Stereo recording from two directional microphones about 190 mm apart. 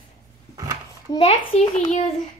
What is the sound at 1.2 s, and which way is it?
A child's voice, 35° left (ahead or behind).